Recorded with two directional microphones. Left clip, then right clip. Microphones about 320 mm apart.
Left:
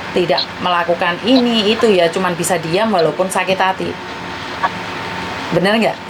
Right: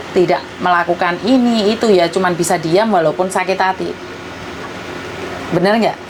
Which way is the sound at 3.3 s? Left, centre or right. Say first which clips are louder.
Even; centre.